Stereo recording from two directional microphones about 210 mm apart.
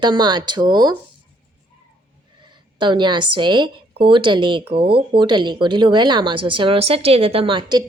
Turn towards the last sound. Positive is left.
turn(degrees=-25)  # may be behind; listen again after turning